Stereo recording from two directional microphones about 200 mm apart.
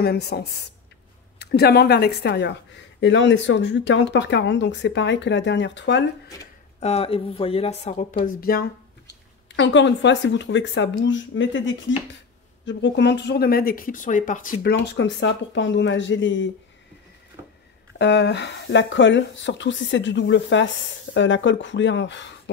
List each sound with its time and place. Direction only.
0.0 s a woman's voice: 55° left (ahead or behind)
6.8 s speech: 30° left (ahead or behind)
8.4 s a sound: 50° left (ahead or behind)
9.6 s speech: 65° left (ahead or behind)
17.9 s speech: 60° left (ahead or behind)